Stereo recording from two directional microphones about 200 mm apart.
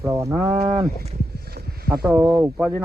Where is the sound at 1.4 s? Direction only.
50° right (ahead or behind).